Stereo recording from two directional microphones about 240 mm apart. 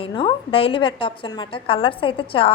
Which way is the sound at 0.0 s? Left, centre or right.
Centre.